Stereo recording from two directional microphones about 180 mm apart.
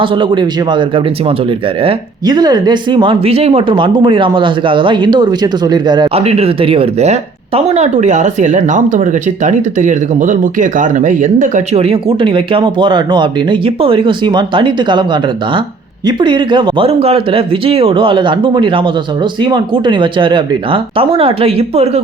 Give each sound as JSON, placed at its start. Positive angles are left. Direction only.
{"t": 0.0, "sound": "speech", "side_deg": -30}